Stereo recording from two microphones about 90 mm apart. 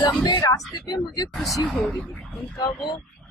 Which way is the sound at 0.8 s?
50° left (ahead or behind).